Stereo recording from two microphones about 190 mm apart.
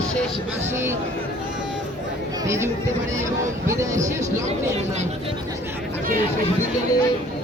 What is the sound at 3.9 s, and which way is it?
Speech, 40° right (ahead or behind).